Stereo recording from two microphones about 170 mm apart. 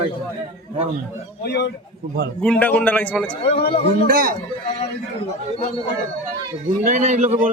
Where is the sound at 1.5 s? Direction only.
80° left.